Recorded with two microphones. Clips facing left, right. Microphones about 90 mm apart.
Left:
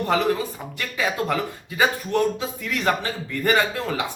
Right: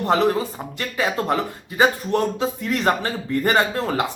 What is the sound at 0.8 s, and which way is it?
A man's voice, 35° right (ahead or behind).